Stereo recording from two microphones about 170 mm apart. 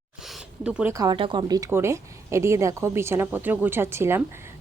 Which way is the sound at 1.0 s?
25° right (ahead or behind).